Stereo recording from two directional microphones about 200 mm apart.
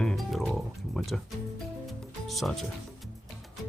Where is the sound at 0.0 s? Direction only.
Centre (ahead or behind).